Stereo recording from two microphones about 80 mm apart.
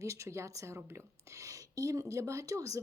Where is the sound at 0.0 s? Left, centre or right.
Right.